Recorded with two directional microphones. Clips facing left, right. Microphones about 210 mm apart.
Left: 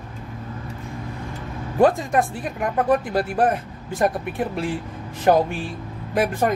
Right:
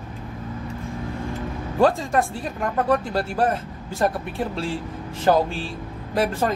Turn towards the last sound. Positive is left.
turn(degrees=15)  # may be behind; listen again after turning